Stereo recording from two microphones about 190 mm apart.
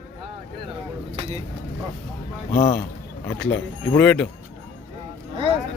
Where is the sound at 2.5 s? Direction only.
40° left (ahead or behind).